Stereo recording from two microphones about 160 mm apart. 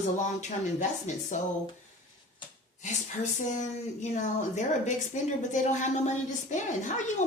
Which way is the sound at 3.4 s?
50° left (ahead or behind).